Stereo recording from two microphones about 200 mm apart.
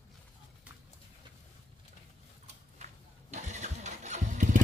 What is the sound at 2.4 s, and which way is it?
Engine starting, 35° right (ahead or behind).